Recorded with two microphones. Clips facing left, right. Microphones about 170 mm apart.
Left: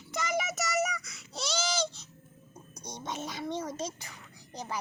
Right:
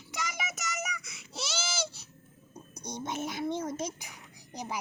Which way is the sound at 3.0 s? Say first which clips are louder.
Right 3 dB; 10° right (ahead or behind).